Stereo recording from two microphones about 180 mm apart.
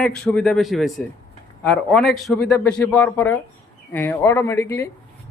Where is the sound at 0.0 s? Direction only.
5° left (ahead or behind).